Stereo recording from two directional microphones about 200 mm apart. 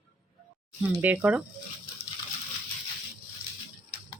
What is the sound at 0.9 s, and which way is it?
Speech, 5° right (ahead or behind).